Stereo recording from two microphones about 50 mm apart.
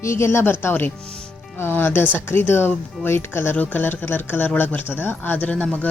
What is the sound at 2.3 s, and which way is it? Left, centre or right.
Speech, left.